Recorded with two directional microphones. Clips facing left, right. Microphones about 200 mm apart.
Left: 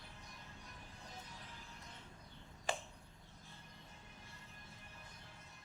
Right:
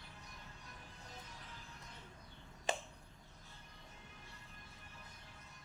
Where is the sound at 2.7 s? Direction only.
20° right (ahead or behind).